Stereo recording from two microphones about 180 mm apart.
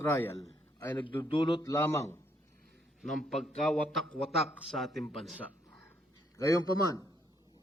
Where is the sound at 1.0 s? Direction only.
30° left (ahead or behind).